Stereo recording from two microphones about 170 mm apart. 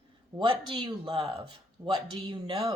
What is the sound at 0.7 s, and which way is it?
Speech, 30° right (ahead or behind).